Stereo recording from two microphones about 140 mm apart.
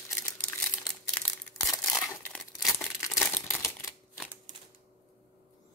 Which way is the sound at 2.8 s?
20° left (ahead or behind).